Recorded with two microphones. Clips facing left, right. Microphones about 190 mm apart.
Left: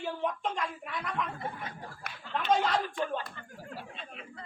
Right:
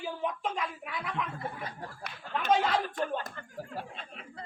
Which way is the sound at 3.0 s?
45° right (ahead or behind).